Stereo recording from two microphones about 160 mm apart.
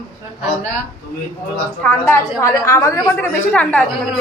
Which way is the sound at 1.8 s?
15° left (ahead or behind).